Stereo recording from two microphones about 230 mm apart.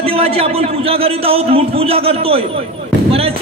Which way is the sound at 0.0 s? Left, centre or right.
Right.